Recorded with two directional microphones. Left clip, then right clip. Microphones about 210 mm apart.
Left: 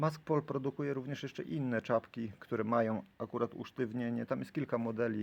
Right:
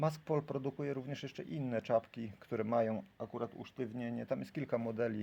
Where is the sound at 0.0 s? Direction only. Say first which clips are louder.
Left 2 dB; 15° left (ahead or behind).